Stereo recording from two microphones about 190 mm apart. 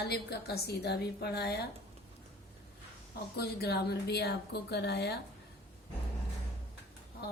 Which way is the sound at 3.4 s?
55° left (ahead or behind).